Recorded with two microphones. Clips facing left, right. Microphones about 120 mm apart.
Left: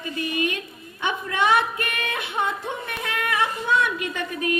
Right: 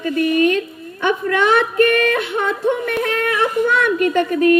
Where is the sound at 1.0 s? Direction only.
60° right (ahead or behind).